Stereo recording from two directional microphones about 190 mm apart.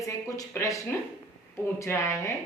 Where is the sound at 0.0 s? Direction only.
15° left (ahead or behind).